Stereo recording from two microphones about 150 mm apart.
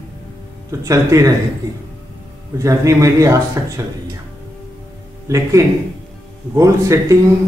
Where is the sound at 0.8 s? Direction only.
20° right (ahead or behind).